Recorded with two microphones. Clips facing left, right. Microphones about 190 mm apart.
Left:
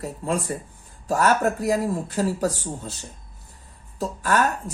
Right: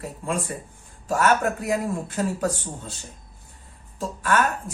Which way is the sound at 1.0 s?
35° left (ahead or behind).